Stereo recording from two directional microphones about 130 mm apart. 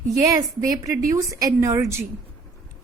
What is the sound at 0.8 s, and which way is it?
A woman's voice, 25° right (ahead or behind).